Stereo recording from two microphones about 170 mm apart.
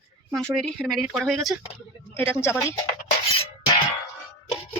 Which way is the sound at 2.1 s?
15° left (ahead or behind).